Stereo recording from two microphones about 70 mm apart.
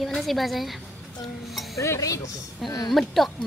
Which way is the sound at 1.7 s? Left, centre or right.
Left.